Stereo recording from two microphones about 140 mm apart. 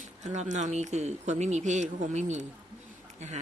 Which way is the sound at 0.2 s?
55° right (ahead or behind).